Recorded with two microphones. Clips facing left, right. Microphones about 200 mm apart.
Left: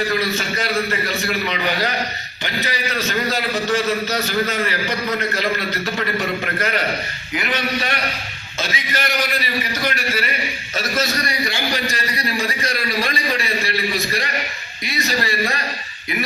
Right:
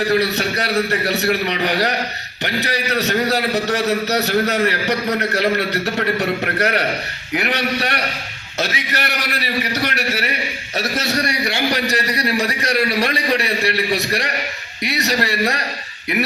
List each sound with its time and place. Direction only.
0.1 s a man's voice: 70° right (ahead or behind)